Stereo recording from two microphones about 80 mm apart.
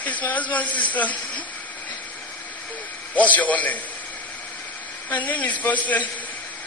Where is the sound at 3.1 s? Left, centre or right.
Centre.